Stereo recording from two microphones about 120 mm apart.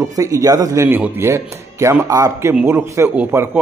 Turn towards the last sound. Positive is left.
turn(degrees=-10)  # may be behind; listen again after turning